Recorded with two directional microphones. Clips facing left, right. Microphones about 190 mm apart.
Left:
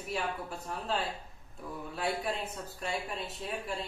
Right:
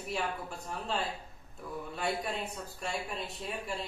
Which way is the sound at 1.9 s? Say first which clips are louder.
Left 1 dB; centre (ahead or behind).